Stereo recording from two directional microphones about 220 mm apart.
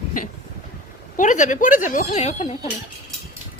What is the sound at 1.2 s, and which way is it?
Speech, 35° left (ahead or behind).